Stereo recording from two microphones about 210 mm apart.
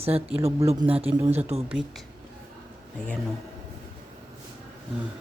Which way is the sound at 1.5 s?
30° right (ahead or behind).